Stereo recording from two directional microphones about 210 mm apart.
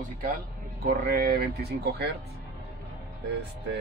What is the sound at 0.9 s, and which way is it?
Speech, 50° right (ahead or behind).